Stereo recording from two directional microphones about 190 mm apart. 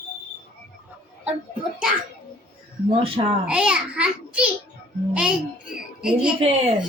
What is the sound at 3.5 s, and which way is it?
Speech, 5° right (ahead or behind).